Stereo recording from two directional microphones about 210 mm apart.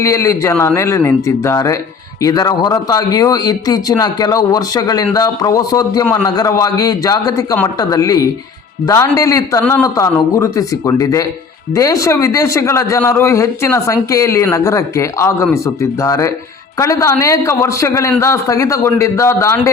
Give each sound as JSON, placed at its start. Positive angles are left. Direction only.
{"t": 0.0, "sound": "a man's voice", "side_deg": 15}